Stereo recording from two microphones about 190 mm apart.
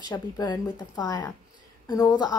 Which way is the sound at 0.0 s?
20° left (ahead or behind).